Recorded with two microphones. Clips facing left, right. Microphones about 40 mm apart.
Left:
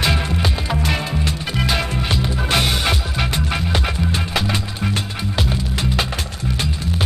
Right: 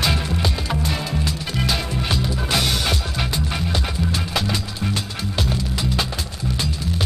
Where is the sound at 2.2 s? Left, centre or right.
Left.